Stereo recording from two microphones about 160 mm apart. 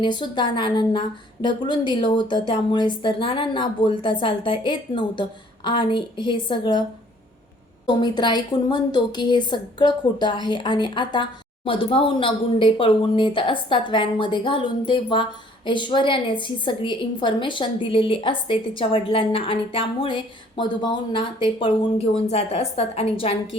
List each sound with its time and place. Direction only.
0.0 s a woman's voice: 30° left (ahead or behind)
7.9 s a woman's voice: 30° left (ahead or behind)